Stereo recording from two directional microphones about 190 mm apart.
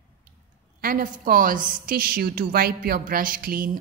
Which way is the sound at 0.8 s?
45° right (ahead or behind).